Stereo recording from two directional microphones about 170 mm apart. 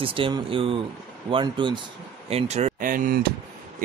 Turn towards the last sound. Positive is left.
turn(degrees=-55)  # may be behind; listen again after turning